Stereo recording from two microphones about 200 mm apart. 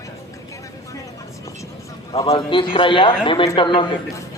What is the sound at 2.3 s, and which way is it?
Speech, 25° left (ahead or behind).